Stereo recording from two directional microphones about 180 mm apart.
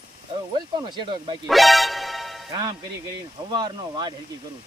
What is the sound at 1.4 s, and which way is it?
Music, centre (ahead or behind).